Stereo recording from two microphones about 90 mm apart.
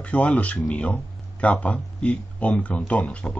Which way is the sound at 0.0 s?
15° left (ahead or behind).